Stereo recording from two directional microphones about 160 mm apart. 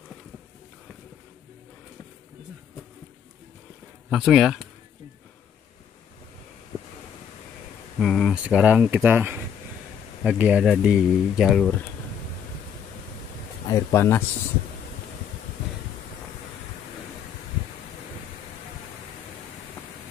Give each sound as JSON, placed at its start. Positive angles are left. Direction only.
{"t": 4.1, "sound": "speech", "side_deg": -5}
{"t": 8.0, "sound": "speech", "side_deg": 0}
{"t": 13.7, "sound": "speech", "side_deg": 20}